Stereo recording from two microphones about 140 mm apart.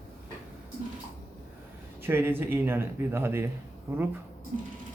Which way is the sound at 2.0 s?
15° right (ahead or behind).